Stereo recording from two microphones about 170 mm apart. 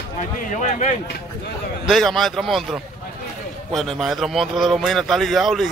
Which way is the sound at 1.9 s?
Centre (ahead or behind).